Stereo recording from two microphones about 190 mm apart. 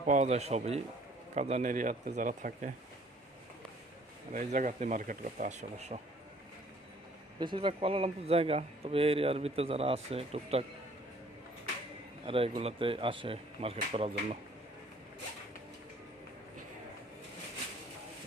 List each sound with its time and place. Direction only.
0.0 s speech: 40° right (ahead or behind)
4.3 s speech: 45° right (ahead or behind)
7.3 s speech: 25° right (ahead or behind)
12.2 s speech: 30° right (ahead or behind)